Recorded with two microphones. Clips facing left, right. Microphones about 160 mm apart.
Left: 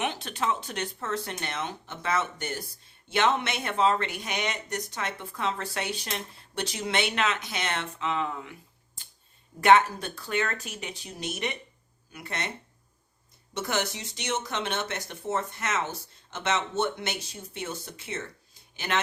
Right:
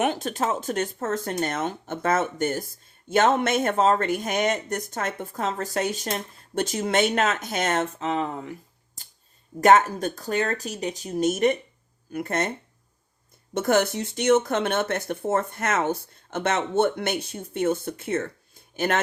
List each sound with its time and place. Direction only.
0.0 s speech: 45° right (ahead or behind)
9.0 s a sound: 40° right (ahead or behind)
9.6 s speech: 45° right (ahead or behind)